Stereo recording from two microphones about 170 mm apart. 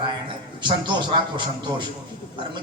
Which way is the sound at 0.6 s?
25° right (ahead or behind).